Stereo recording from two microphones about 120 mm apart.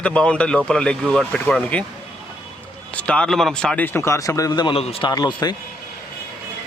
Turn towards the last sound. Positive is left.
turn(degrees=35)  # may be behind; listen again after turning